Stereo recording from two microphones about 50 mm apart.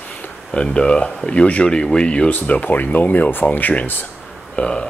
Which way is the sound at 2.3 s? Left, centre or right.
Left.